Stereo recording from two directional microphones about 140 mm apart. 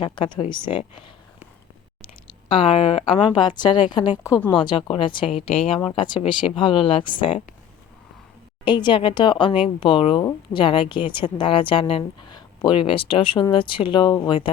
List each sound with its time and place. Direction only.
0.0 s a woman's voice: 35° left (ahead or behind)
8.6 s a woman's voice: 35° left (ahead or behind)